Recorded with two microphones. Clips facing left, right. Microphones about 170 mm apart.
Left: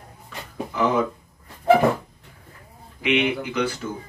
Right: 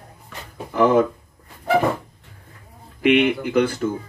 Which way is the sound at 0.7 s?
50° right (ahead or behind).